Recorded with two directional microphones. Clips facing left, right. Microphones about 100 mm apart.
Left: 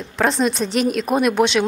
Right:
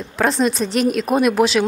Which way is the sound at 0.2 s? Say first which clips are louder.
Right 1 dB; centre (ahead or behind).